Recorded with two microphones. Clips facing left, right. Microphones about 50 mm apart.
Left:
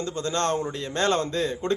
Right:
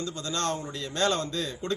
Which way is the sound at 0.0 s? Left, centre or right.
Left.